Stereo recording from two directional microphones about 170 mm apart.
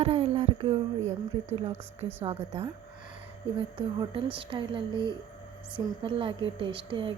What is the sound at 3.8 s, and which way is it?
A woman's voice, 30° right (ahead or behind).